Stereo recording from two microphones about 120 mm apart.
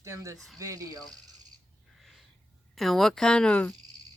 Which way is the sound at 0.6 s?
30° right (ahead or behind).